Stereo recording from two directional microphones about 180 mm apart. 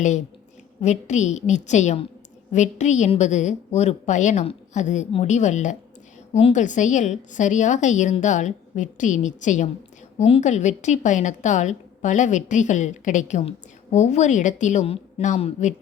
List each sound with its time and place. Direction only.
0.8 s a woman's voice: 40° left (ahead or behind)